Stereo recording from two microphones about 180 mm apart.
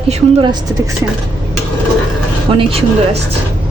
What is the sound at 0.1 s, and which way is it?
Speech, 30° right (ahead or behind).